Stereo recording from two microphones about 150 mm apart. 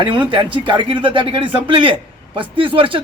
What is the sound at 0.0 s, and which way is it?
Speech, 35° right (ahead or behind).